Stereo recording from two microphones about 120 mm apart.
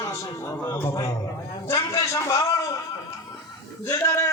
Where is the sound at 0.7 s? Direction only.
25° left (ahead or behind).